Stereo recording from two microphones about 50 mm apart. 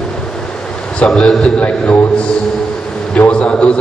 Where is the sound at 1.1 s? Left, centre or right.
Centre.